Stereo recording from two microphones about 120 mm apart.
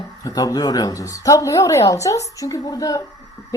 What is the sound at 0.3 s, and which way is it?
A woman's voice, 30° left (ahead or behind).